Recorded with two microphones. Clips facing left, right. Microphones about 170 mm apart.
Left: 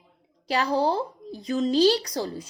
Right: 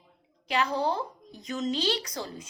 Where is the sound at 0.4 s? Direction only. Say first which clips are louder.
Left 4 dB; 35° left (ahead or behind).